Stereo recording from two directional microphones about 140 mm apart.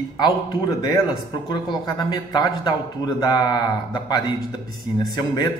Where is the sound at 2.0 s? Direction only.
30° left (ahead or behind).